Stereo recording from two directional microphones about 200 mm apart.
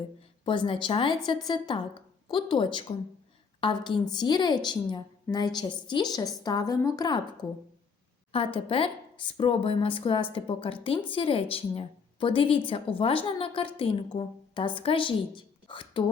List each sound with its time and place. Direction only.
0.4 s speech: 25° left (ahead or behind)
8.3 s speech: 25° left (ahead or behind)